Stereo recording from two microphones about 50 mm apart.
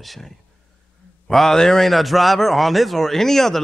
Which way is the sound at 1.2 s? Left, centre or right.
Centre.